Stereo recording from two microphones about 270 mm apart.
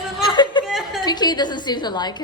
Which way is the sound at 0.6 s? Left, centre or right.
Centre.